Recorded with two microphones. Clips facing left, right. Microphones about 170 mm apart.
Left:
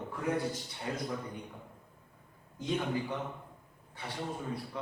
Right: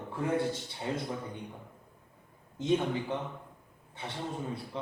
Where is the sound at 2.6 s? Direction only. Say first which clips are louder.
Right 7 dB; 20° right (ahead or behind).